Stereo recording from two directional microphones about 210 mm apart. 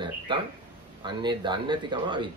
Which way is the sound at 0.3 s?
20° right (ahead or behind).